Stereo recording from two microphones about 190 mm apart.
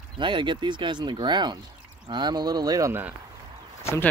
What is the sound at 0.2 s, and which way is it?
Speech, 25° right (ahead or behind).